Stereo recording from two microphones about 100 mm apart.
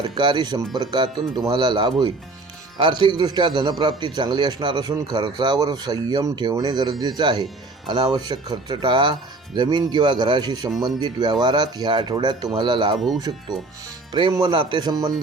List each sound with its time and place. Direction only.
0.0 s a man's voice: 50° right (ahead or behind)